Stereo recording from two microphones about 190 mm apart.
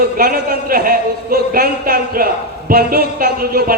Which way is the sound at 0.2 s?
50° right (ahead or behind).